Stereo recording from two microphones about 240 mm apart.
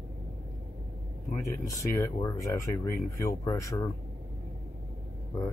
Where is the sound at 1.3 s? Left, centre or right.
Centre.